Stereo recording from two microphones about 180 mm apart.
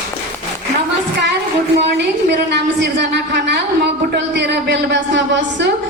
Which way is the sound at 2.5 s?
75° right (ahead or behind).